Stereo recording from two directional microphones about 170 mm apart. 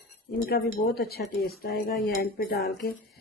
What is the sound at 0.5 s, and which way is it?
Speech, 65° left (ahead or behind).